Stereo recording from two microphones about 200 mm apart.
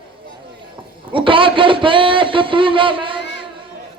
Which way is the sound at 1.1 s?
25° right (ahead or behind).